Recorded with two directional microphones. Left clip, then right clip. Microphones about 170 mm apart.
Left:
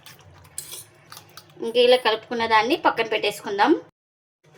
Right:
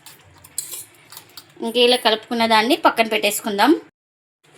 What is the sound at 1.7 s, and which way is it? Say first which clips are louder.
Speech: right 2 dB; 45° right (ahead or behind).